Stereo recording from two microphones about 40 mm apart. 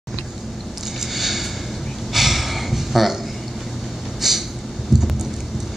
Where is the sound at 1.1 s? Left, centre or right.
Centre.